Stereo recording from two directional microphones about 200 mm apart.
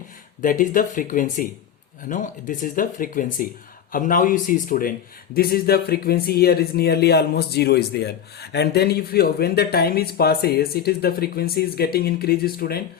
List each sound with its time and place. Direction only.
0.4 s a man's voice: 40° left (ahead or behind)